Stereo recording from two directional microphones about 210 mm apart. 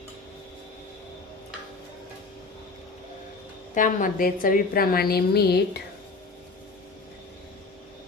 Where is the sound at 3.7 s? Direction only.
40° left (ahead or behind).